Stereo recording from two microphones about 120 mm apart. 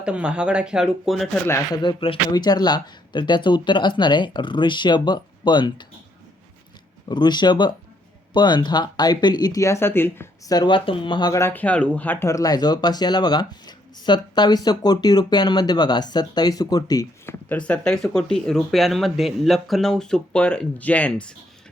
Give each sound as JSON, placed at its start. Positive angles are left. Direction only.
{"t": 0.0, "sound": "speech", "side_deg": -10}
{"t": 1.7, "sound": "speech", "side_deg": 40}
{"t": 7.1, "sound": "speech", "side_deg": 40}
{"t": 10.5, "sound": "speech", "side_deg": 40}
{"t": 11.3, "sound": "speech", "side_deg": 15}
{"t": 17.2, "sound": "speech", "side_deg": 10}